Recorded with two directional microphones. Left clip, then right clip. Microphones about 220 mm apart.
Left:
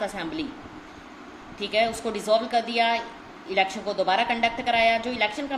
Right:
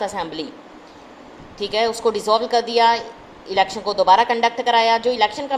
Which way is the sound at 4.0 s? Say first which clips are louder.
Right 8 dB; 20° right (ahead or behind).